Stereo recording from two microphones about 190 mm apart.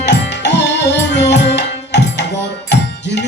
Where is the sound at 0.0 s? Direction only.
65° left (ahead or behind).